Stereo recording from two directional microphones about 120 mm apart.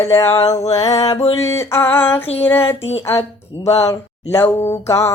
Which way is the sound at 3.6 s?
25° left (ahead or behind).